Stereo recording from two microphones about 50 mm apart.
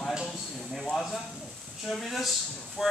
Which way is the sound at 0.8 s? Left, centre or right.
Centre.